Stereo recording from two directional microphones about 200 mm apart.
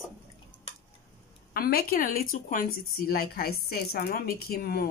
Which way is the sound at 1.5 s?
50° left (ahead or behind).